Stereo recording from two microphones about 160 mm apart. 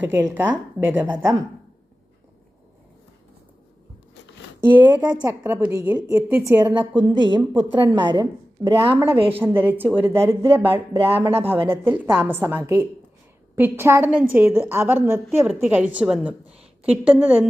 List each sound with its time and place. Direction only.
0.0 s a woman's voice: 15° right (ahead or behind)
4.6 s a woman's voice: 10° right (ahead or behind)
6.9 s a woman's voice: 30° right (ahead or behind)
9.4 s a woman's voice: 15° right (ahead or behind)
10.9 s speech: 35° right (ahead or behind)
11.2 s a woman's voice: 15° right (ahead or behind)